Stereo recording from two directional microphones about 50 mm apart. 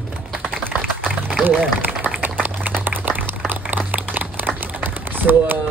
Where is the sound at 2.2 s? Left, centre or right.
Right.